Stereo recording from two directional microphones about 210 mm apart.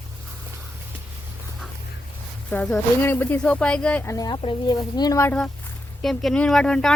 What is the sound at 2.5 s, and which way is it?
Speech, 5° left (ahead or behind).